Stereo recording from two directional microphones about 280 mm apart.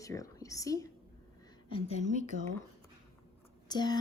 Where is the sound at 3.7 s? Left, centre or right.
Centre.